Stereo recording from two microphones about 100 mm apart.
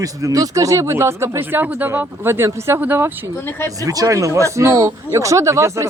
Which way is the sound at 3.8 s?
35° right (ahead or behind).